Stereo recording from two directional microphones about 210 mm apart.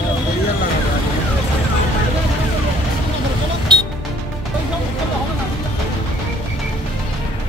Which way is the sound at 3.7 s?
20° right (ahead or behind).